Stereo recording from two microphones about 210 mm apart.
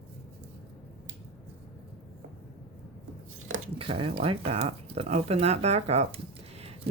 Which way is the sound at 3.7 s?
25° right (ahead or behind).